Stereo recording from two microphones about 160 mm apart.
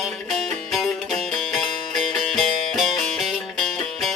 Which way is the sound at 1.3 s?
Centre (ahead or behind).